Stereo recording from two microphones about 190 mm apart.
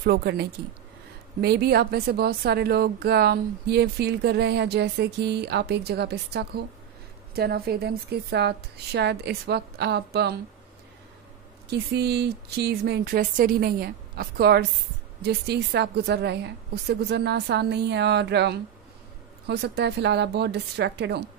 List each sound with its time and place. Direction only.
0.0 s a woman's voice: 55° right (ahead or behind)
11.7 s a woman's voice: 60° right (ahead or behind)